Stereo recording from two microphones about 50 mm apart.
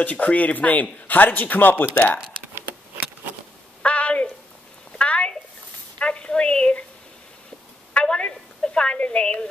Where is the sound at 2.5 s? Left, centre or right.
Right.